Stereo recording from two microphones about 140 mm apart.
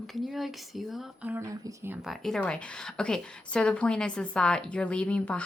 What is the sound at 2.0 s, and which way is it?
Speech, 5° left (ahead or behind).